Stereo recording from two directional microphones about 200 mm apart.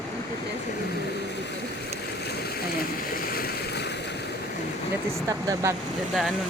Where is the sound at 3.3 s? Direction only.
55° left (ahead or behind).